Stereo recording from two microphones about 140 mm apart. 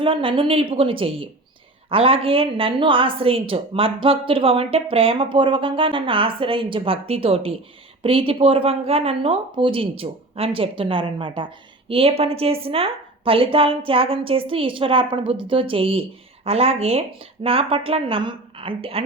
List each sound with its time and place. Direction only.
0.0 s a woman's voice: 40° right (ahead or behind)